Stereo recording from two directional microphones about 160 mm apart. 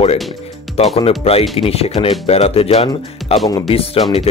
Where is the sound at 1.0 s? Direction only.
40° left (ahead or behind).